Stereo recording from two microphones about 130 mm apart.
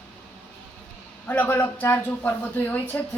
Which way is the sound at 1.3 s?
15° left (ahead or behind).